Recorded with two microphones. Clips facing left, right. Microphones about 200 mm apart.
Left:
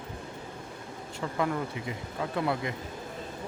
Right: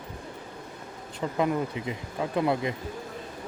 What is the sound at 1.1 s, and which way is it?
Speech, 20° right (ahead or behind).